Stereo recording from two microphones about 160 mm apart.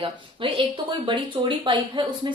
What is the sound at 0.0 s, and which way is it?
A woman's voice, 35° right (ahead or behind).